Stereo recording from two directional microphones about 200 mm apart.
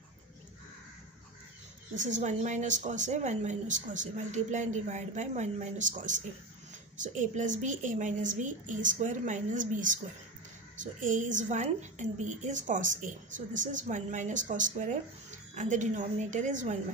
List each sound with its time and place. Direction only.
2.0 s a woman's voice: 35° right (ahead or behind)